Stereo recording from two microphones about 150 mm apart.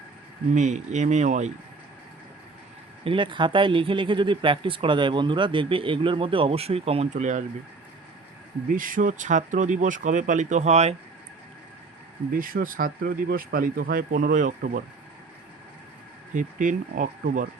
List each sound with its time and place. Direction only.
0.5 s speech: 55° right (ahead or behind)
3.0 s speech: 35° right (ahead or behind); by 7.4 s 55° right (ahead or behind)
8.7 s speech: 65° right (ahead or behind); by 10.9 s 45° right (ahead or behind)
12.3 s speech: 70° right (ahead or behind)
16.3 s speech: 60° right (ahead or behind)